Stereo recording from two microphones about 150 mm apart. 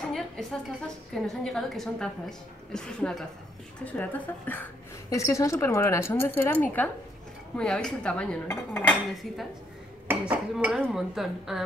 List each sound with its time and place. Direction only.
0.1 s a woman's voice: centre (ahead or behind)
8.8 s a woman's voice: centre (ahead or behind)
10.0 s dishes: 10° right (ahead or behind)
10.9 s a woman's voice: centre (ahead or behind)